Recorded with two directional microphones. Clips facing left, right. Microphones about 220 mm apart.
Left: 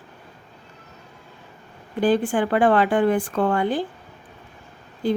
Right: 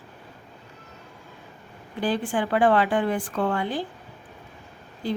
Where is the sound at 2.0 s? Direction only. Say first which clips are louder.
Left 6 dB; 50° left (ahead or behind).